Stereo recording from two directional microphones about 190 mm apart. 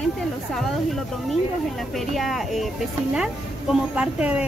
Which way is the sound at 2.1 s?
Centre (ahead or behind).